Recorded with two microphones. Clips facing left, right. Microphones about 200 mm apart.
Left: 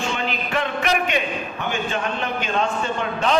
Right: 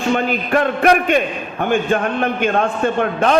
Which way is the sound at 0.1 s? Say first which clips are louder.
Right 8 dB; 50° right (ahead or behind).